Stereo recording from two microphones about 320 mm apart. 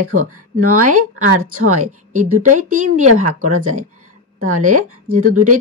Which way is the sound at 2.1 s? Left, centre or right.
Right.